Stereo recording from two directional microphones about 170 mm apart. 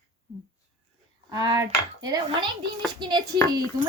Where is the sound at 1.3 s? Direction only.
20° right (ahead or behind).